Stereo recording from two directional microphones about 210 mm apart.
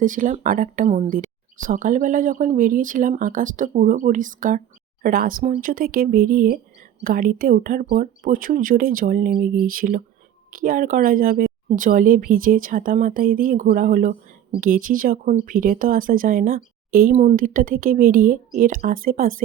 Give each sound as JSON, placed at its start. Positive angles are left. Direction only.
{"t": 0.0, "sound": "speech", "side_deg": -40}